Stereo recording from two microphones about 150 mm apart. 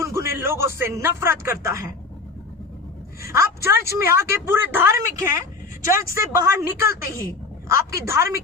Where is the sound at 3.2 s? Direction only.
20° right (ahead or behind).